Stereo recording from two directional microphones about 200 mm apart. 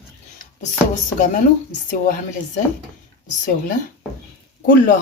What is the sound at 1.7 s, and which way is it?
Speech, 45° left (ahead or behind).